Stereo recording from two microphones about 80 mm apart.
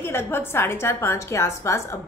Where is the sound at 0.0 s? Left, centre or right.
Left.